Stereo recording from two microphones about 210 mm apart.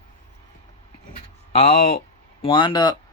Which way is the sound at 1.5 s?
30° left (ahead or behind).